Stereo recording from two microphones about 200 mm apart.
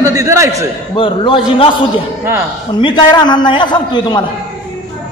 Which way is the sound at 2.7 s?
20° left (ahead or behind).